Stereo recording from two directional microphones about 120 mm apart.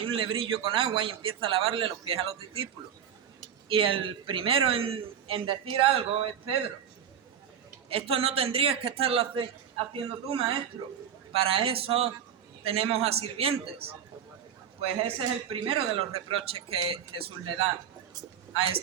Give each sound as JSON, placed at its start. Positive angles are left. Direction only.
{"t": 0.0, "sound": "a man's voice", "side_deg": -50}
{"t": 3.7, "sound": "a man's voice", "side_deg": -45}
{"t": 7.9, "sound": "a man's voice", "side_deg": -50}